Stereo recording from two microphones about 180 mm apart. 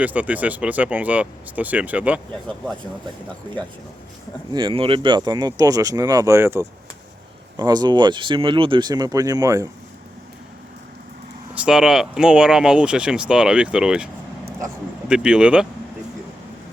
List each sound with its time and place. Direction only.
0.0 s speech: 10° right (ahead or behind)
4.5 s speech: 30° right (ahead or behind)
11.5 s speech: 5° right (ahead or behind)